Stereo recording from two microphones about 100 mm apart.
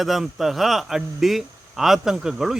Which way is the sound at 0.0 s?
Centre (ahead or behind).